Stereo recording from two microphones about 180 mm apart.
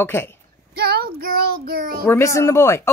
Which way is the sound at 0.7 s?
60° right (ahead or behind).